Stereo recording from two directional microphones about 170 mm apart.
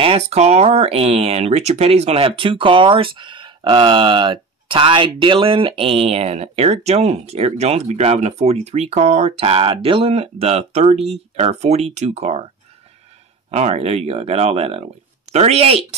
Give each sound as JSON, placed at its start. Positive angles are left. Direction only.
{"t": 0.0, "sound": "speech", "side_deg": -35}
{"t": 13.5, "sound": "speech", "side_deg": -40}